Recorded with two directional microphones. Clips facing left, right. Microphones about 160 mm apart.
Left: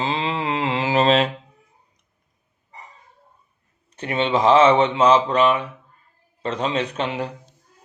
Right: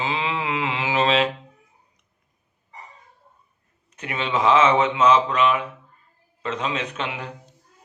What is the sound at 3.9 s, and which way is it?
Mantra, 30° left (ahead or behind).